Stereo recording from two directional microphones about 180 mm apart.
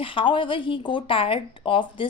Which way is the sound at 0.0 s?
30° left (ahead or behind).